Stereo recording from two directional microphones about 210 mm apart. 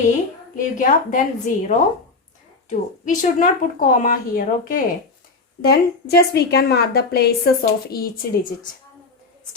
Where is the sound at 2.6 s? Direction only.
35° left (ahead or behind).